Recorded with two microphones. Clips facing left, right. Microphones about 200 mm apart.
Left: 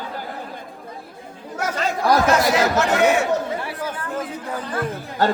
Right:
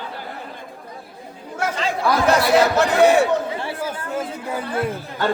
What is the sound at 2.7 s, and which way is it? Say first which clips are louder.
A man's voice: right 3 dB; 35° right (ahead or behind).